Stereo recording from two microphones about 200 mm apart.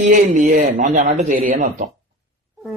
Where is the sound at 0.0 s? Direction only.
40° right (ahead or behind).